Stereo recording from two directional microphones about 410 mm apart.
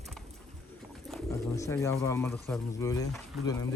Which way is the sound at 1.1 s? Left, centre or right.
Centre.